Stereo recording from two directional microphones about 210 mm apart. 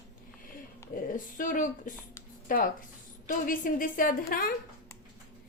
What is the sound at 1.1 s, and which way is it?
A woman's voice, 40° left (ahead or behind).